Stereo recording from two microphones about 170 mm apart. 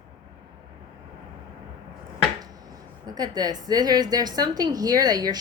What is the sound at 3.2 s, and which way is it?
A woman's voice, 25° right (ahead or behind).